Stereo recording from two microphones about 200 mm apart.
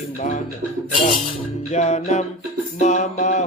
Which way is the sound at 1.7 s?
35° left (ahead or behind).